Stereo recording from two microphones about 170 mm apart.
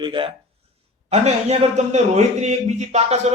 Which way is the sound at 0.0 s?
30° right (ahead or behind).